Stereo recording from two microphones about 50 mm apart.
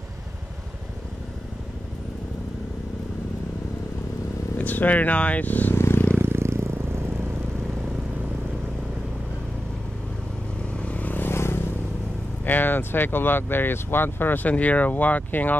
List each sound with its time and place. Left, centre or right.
4.6 s speech: left
5.8 s vehicle: left
6.2 s vehicle: right
10.8 s vehicle: left
11.2 s vehicle: left
12.4 s speech: left
14.5 s speech: left